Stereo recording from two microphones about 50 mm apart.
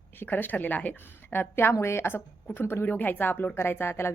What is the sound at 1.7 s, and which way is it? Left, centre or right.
A woman's voice, left.